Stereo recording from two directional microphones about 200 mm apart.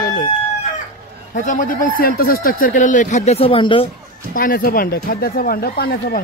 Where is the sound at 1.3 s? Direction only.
40° left (ahead or behind).